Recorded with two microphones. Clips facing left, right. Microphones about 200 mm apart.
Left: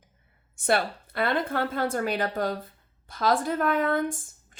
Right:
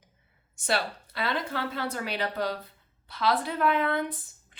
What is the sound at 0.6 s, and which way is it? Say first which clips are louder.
Speech: left 4 dB; 55° left (ahead or behind).